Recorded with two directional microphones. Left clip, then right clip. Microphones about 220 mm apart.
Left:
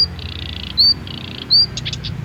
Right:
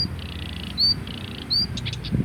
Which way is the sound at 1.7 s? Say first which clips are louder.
Left 6 dB; 25° left (ahead or behind).